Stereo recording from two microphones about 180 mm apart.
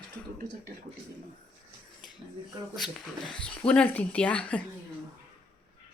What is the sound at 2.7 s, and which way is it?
Speech, centre (ahead or behind).